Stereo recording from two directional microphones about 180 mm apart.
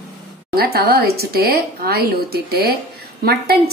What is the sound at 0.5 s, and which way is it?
A woman's voice, 60° right (ahead or behind).